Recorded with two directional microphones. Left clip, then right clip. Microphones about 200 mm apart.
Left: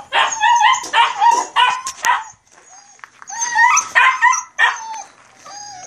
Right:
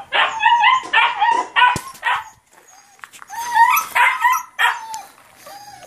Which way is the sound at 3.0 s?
5° right (ahead or behind).